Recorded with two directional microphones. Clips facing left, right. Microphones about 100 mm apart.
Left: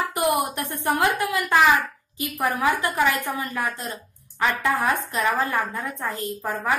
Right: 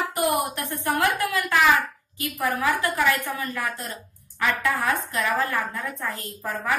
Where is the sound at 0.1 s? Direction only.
20° left (ahead or behind).